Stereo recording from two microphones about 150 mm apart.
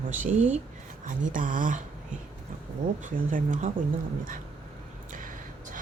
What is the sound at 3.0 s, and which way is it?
Speech, 60° right (ahead or behind).